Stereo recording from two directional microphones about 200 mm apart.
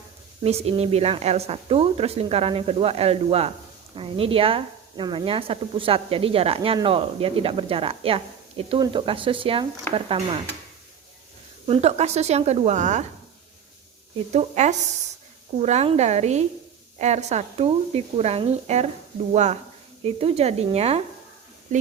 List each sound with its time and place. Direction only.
0.4 s a woman's voice: 30° right (ahead or behind)
11.6 s a woman's voice: 30° right (ahead or behind)
14.3 s a woman's voice: 35° right (ahead or behind)